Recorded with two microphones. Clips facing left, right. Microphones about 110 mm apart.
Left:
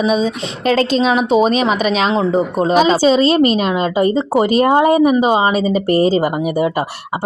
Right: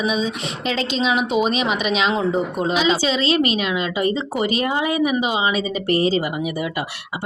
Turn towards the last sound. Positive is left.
turn(degrees=40)  # may be behind; listen again after turning